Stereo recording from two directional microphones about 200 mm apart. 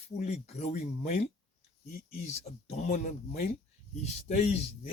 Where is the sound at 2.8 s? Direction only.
40° left (ahead or behind).